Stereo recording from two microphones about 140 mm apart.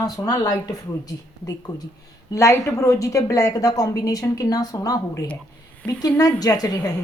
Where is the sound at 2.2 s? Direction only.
20° left (ahead or behind).